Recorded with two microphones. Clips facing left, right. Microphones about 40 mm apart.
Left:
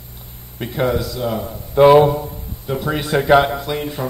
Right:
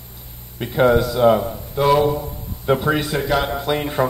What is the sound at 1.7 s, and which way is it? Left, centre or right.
Speech, left.